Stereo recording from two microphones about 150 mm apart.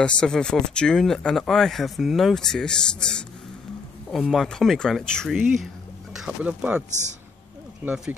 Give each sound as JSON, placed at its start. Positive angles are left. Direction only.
{"t": 0.0, "sound": "speech", "side_deg": 5}
{"t": 6.9, "sound": "a man's voice", "side_deg": -50}
{"t": 7.8, "sound": "speech", "side_deg": -10}